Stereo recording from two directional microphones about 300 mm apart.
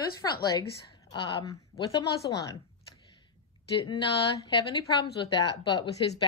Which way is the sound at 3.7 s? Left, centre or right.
Centre.